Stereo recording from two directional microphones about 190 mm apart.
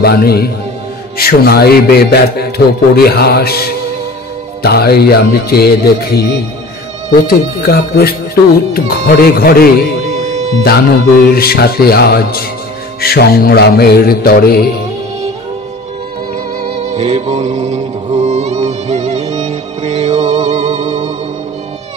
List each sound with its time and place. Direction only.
0.0 s speech: 55° left (ahead or behind)
7.2 s speech: 55° left (ahead or behind)
10.1 s music: 35° right (ahead or behind)
10.6 s speech: 55° left (ahead or behind)
16.6 s music: 35° right (ahead or behind)